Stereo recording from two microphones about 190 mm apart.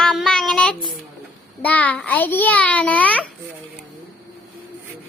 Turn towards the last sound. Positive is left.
turn(degrees=10)  # may be behind; listen again after turning